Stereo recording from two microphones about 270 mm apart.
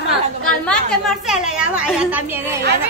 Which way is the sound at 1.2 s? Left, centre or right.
Centre.